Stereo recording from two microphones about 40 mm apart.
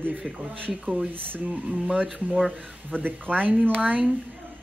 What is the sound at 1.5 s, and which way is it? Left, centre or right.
Speech, right.